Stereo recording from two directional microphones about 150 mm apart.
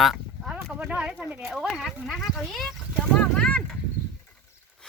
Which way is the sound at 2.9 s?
10° left (ahead or behind).